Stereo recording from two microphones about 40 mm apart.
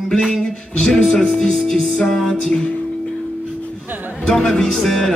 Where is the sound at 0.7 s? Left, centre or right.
Centre.